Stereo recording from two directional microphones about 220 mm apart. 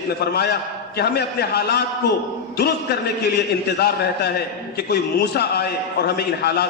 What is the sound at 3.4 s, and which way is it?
A man's voice, 50° left (ahead or behind).